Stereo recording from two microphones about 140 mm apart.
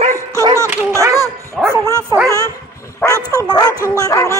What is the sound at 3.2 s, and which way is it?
Bow-wow, 25° left (ahead or behind).